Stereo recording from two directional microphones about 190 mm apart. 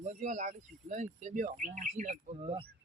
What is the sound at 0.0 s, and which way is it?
Speech, 40° right (ahead or behind).